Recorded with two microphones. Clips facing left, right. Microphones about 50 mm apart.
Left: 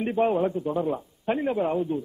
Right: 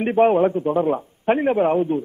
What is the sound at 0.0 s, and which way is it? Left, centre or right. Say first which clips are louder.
A man's voice: right 7 dB; right.